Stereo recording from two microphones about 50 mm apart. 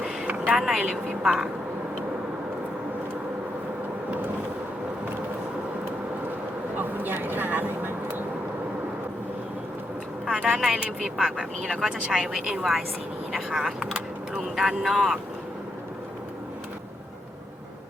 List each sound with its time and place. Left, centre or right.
0.0 s a sound: centre
0.5 s speech: centre
6.7 s vehicle: right
10.2 s speech: centre
11.3 s speech: centre